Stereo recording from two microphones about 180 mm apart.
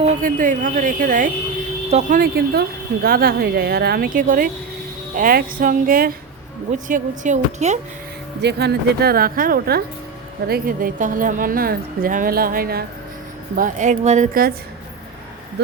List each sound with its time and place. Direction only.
0.0 s a woman's voice: 50° right (ahead or behind)
8.4 s a woman's voice: 70° right (ahead or behind)
13.6 s speech: 40° right (ahead or behind)